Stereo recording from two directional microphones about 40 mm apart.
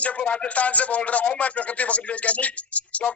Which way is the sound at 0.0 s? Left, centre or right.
Left.